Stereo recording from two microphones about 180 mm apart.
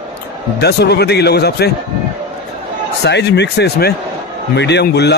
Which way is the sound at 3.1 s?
70° left (ahead or behind).